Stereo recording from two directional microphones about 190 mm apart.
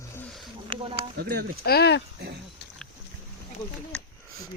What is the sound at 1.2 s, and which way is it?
Speech, 60° right (ahead or behind).